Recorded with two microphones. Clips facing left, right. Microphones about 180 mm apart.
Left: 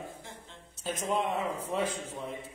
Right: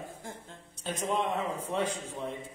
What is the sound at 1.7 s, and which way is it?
Speech, centre (ahead or behind).